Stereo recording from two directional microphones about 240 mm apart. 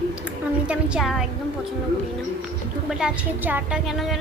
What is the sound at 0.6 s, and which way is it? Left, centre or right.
Speech, centre.